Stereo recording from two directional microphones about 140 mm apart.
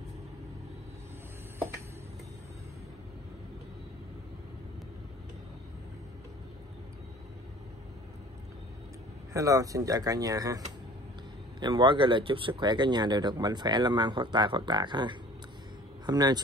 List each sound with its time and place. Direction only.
9.3 s speech: 25° right (ahead or behind)
11.6 s speech: 35° right (ahead or behind)